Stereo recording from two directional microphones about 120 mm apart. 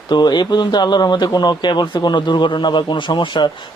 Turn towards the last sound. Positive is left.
turn(degrees=40)  # may be behind; listen again after turning